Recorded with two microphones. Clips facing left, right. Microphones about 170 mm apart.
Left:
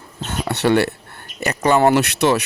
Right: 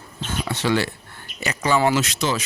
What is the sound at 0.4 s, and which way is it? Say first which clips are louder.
Speech: left 6 dB; 65° left (ahead or behind).